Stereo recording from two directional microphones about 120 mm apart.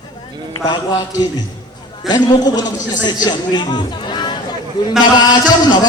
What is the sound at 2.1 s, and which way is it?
A man's voice, 35° left (ahead or behind).